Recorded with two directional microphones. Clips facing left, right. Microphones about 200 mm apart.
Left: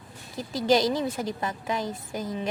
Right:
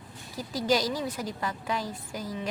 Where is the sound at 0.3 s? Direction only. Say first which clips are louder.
Left 4 dB; 25° left (ahead or behind).